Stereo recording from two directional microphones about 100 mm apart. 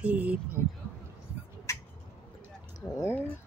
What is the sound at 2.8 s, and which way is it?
Speech, 30° left (ahead or behind).